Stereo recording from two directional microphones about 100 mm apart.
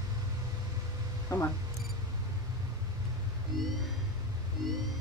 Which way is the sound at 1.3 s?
30° left (ahead or behind).